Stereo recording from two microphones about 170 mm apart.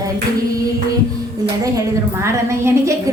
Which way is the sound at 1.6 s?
20° right (ahead or behind).